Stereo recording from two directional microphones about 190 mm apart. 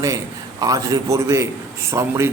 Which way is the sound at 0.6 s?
20° right (ahead or behind).